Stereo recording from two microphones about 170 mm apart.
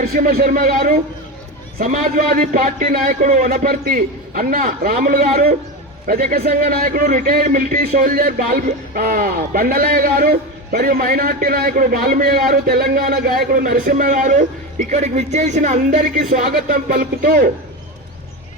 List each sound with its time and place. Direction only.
0.0 s a man's voice: 60° right (ahead or behind)